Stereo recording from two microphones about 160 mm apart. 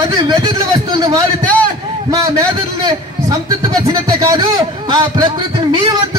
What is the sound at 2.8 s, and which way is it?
A man's voice, 20° right (ahead or behind).